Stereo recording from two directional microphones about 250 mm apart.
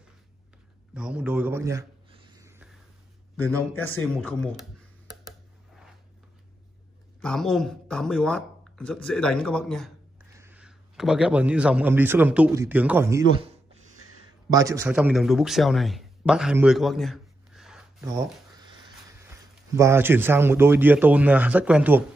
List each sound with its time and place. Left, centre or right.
0.9 s a sound: centre
3.3 s speech: centre
7.2 s speech: centre
10.3 s a man's voice: centre
13.4 s a sound: right
14.5 s a man's voice: centre
19.7 s a man's voice: centre